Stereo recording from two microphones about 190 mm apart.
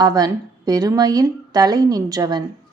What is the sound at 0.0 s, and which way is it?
A woman's voice, 20° right (ahead or behind).